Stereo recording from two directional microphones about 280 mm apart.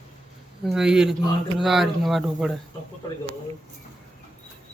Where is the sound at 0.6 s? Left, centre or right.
Centre.